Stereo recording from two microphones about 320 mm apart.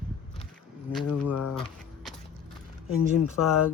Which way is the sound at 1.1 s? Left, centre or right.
Left.